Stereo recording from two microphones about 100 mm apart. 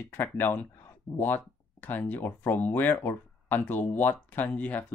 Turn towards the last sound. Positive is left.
turn(degrees=15)  # may be behind; listen again after turning